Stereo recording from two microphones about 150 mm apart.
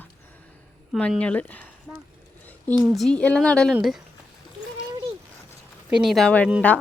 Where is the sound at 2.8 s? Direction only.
Centre (ahead or behind).